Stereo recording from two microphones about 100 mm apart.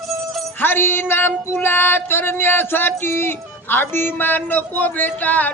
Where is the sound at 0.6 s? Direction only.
20° left (ahead or behind).